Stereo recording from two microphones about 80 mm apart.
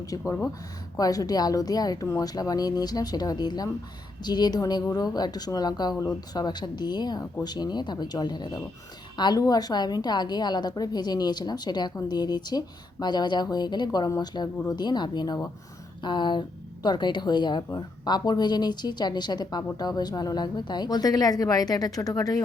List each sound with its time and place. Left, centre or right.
0.0 s a woman's voice: left
9.4 s a woman's voice: left